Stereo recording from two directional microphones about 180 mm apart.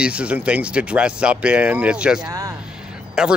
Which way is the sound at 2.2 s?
20° right (ahead or behind).